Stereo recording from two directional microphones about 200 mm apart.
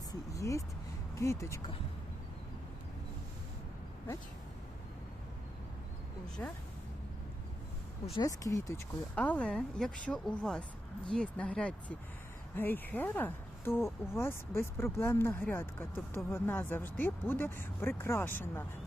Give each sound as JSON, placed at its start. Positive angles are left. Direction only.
{"t": 0.1, "sound": "vehicle", "side_deg": 15}
{"t": 1.1, "sound": "speech", "side_deg": 15}
{"t": 6.4, "sound": "speech", "side_deg": 10}
{"t": 8.1, "sound": "speech", "side_deg": 20}